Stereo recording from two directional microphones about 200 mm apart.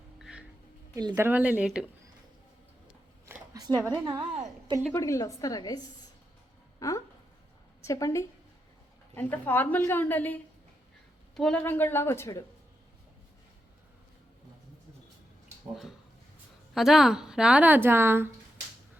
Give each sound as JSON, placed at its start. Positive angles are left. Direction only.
{"t": 0.2, "sound": "music", "side_deg": -5}
{"t": 0.9, "sound": "speech", "side_deg": -15}
{"t": 3.5, "sound": "a sound", "side_deg": -20}
{"t": 4.8, "sound": "a woman's voice", "side_deg": 15}
{"t": 16.7, "sound": "a woman's voice", "side_deg": 0}